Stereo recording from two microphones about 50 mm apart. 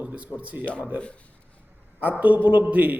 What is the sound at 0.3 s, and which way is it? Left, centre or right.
Speech, right.